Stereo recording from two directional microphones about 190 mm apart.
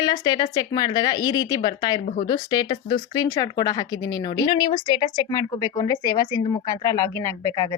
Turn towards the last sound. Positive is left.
turn(degrees=15)  # may be behind; listen again after turning